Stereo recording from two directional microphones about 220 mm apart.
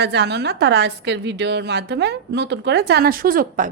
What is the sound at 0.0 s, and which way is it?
A woman's voice, 50° right (ahead or behind).